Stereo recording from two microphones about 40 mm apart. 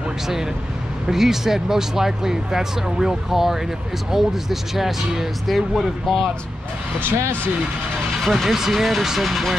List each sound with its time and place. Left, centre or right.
1.0 s speech: centre
7.0 s speech: right
8.2 s speech: centre